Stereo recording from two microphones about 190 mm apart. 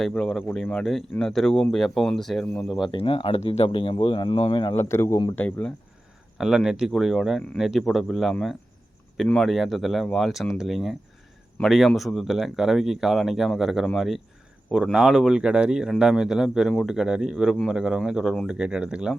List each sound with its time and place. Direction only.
0.0 s speech: 5° left (ahead or behind)
2.9 s speech: 25° left (ahead or behind)
4.8 s speech: 15° left (ahead or behind); by 19.1 s 5° right (ahead or behind)